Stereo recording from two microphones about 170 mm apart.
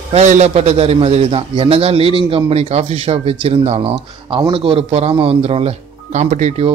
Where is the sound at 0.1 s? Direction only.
40° right (ahead or behind).